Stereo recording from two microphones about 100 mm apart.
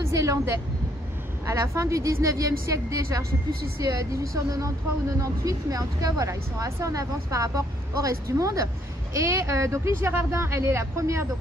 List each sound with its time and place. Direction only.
0.0 s vehicle: 35° right (ahead or behind)
1.4 s speech: 30° right (ahead or behind)